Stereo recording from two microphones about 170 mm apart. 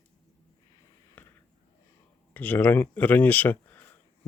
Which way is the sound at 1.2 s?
10° left (ahead or behind).